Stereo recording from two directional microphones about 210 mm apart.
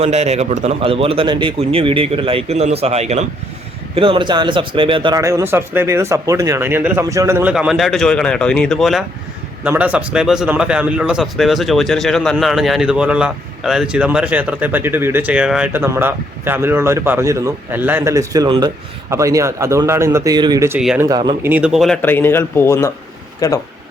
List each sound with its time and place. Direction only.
0.0 s a man's voice: 30° right (ahead or behind); by 21.1 s 5° right (ahead or behind)
21.1 s a man's voice: 20° right (ahead or behind)
21.5 s speech: 5° right (ahead or behind); by 23.6 s 15° left (ahead or behind)